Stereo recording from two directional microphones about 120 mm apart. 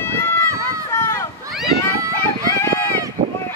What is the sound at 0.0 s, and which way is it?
Run, 20° left (ahead or behind).